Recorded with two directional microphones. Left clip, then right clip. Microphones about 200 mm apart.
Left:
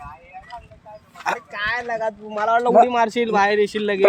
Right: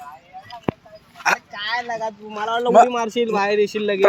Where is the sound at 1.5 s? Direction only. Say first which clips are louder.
Left 1 dB; 15° left (ahead or behind).